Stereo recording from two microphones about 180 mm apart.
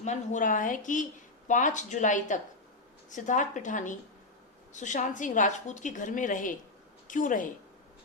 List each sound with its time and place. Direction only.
0.0 s a woman's voice: 40° left (ahead or behind)